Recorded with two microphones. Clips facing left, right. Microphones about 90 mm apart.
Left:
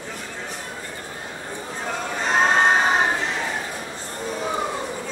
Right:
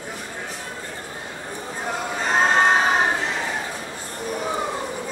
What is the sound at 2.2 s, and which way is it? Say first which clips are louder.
Crowd: even; centre (ahead or behind).